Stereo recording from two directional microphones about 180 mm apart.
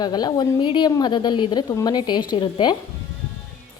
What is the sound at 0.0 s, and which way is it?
A woman's voice, 20° left (ahead or behind).